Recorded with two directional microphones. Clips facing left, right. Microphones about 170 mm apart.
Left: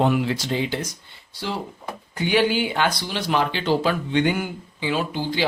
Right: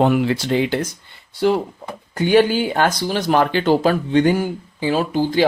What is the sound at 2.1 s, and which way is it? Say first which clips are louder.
Speech: right 6 dB; 45° right (ahead or behind).